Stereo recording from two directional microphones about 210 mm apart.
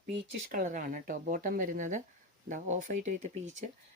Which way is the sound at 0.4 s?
40° right (ahead or behind).